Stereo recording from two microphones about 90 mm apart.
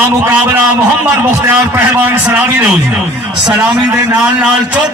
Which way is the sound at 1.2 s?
20° right (ahead or behind).